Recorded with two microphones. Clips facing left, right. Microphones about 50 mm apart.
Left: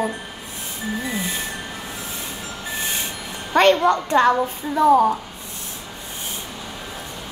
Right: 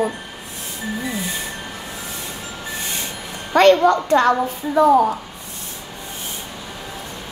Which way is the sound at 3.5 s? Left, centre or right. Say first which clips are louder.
Right 3 dB; left.